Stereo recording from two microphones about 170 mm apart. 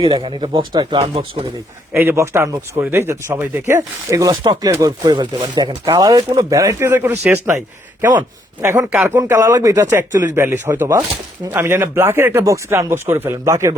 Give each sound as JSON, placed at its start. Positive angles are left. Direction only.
{"t": 0.0, "sound": "speech", "side_deg": -30}
{"t": 1.9, "sound": "speech", "side_deg": -15}
{"t": 8.6, "sound": "speech", "side_deg": -15}